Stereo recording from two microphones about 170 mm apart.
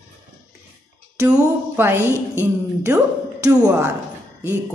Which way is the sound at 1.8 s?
15° right (ahead or behind).